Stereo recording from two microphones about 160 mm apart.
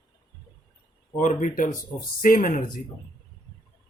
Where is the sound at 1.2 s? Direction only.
50° left (ahead or behind).